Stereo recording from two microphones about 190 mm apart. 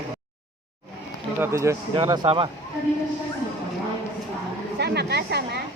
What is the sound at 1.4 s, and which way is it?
A man's voice, 15° right (ahead or behind).